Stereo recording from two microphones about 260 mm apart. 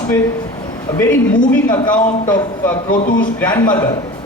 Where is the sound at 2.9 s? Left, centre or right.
Left.